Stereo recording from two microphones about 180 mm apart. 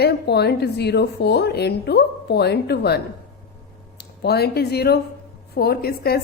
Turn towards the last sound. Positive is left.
turn(degrees=60)  # may be behind; listen again after turning